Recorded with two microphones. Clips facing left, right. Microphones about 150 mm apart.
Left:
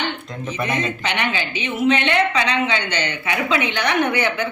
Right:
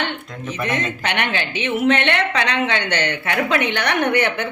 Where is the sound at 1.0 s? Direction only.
65° right (ahead or behind).